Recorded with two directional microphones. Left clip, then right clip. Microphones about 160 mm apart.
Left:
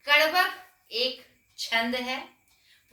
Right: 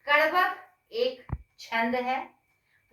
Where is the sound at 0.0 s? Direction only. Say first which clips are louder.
Left 1 dB; 15° left (ahead or behind).